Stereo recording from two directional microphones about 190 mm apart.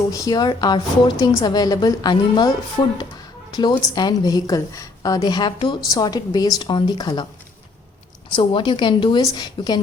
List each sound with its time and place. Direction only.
0.1 s a woman's voice: 20° left (ahead or behind)
8.3 s a woman's voice: 25° left (ahead or behind)